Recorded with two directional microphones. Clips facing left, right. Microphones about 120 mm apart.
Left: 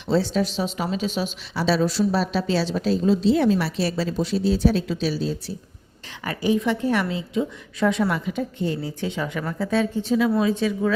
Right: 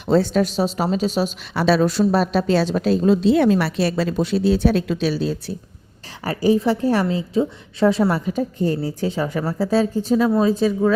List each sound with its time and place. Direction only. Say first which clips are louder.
0.1 s a woman's voice: right 4 dB; 50° right (ahead or behind)
1.5 s a woman's voice: right 4 dB; 60° right (ahead or behind)
6.2 s a woman's voice: right 4 dB; 35° right (ahead or behind)